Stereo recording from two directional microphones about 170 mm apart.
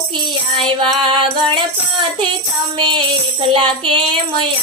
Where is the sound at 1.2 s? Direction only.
30° right (ahead or behind).